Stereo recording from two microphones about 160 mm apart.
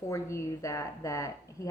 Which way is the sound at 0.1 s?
15° left (ahead or behind).